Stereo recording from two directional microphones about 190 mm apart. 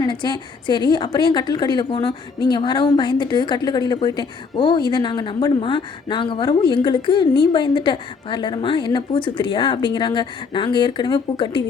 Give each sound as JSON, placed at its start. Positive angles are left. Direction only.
{"t": 0.0, "sound": "a woman's voice", "side_deg": 25}